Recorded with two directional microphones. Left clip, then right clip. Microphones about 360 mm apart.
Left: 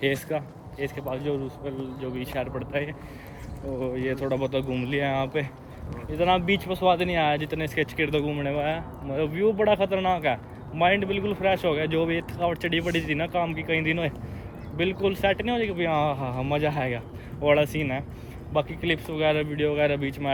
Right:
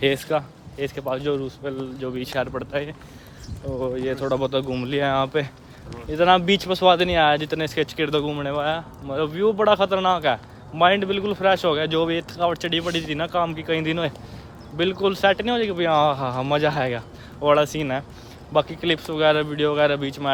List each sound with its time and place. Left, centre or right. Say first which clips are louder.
0.0 s a man's voice: right 5 dB; centre
3.9 s speech: right 4 dB; centre